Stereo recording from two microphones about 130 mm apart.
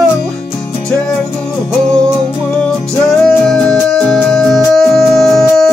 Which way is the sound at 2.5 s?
5° left (ahead or behind).